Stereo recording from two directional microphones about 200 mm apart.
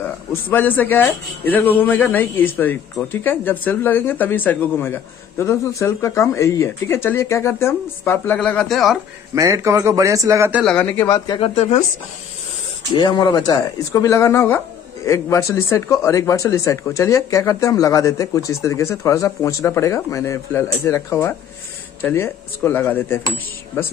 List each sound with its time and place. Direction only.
0.0 s a man's voice: 10° left (ahead or behind)
9.3 s a man's voice: 15° right (ahead or behind)
10.6 s a man's voice: 5° left (ahead or behind); by 11.8 s 30° left (ahead or behind)
12.9 s a man's voice: 20° left (ahead or behind)